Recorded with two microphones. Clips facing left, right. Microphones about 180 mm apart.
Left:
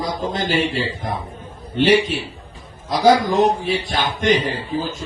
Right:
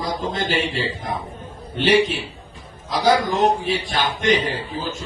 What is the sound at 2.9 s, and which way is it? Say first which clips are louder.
Speech: left 3 dB; 45° left (ahead or behind).